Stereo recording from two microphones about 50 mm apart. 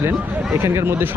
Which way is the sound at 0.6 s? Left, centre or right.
Right.